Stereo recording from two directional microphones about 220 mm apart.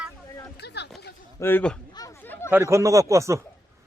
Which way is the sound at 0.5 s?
50° left (ahead or behind).